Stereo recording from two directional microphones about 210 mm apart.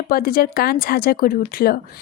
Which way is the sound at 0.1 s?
45° left (ahead or behind).